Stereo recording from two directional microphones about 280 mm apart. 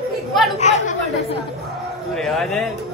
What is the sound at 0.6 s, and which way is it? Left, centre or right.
Chatter, left.